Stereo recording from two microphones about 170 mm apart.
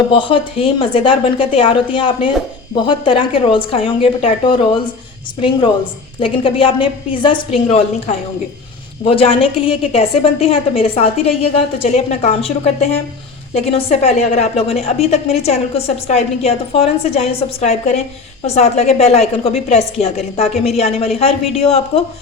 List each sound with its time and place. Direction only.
0.1 s a woman's voice: 30° left (ahead or behind)
6.1 s a woman's voice: 30° left (ahead or behind)